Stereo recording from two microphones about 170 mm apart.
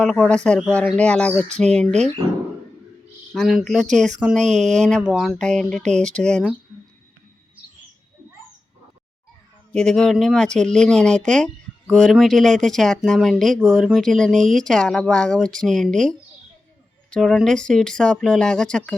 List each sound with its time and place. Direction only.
0.0 s speech: 5° left (ahead or behind)
3.3 s speech: centre (ahead or behind)
4.4 s speech: 45° right (ahead or behind)
4.9 s speech: 5° right (ahead or behind)
9.7 s speech: 5° left (ahead or behind)